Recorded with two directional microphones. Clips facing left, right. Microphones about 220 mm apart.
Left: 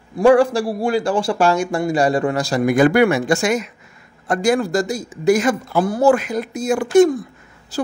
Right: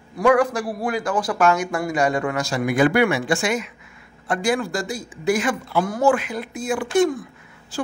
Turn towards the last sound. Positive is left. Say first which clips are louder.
# left 4 dB
turn(degrees=40)  # may be behind; listen again after turning